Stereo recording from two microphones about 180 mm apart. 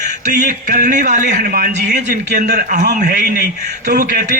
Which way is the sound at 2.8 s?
60° right (ahead or behind).